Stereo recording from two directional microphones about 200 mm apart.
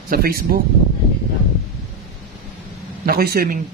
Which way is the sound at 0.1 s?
50° right (ahead or behind).